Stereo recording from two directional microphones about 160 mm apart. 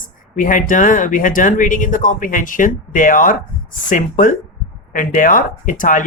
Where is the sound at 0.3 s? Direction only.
55° left (ahead or behind).